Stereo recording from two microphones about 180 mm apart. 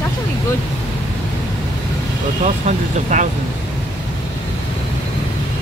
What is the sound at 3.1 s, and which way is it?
Speech, 45° right (ahead or behind).